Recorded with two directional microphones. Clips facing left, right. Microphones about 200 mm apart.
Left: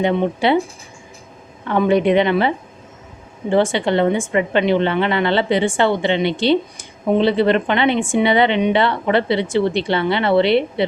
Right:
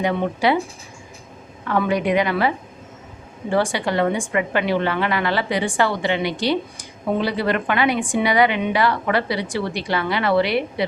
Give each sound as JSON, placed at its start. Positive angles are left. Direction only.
{"t": 0.0, "sound": "a woman's voice", "side_deg": 25}
{"t": 1.6, "sound": "a woman's voice", "side_deg": 25}
{"t": 3.5, "sound": "a woman's voice", "side_deg": 25}